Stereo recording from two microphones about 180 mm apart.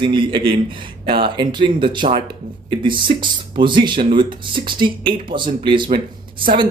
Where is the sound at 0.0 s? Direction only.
25° right (ahead or behind).